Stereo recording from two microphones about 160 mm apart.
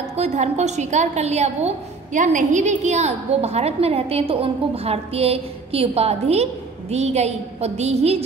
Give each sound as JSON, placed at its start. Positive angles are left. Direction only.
{"t": 0.1, "sound": "a woman's voice", "side_deg": -45}